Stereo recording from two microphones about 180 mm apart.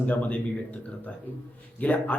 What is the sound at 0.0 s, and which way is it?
Speech, 10° left (ahead or behind).